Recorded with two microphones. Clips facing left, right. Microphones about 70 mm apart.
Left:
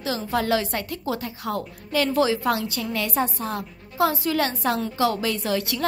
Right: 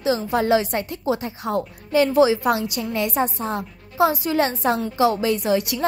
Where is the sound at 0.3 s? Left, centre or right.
Right.